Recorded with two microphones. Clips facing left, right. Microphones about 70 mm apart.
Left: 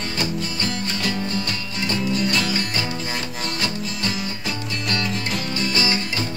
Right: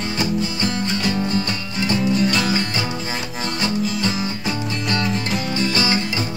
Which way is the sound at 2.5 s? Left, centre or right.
Centre.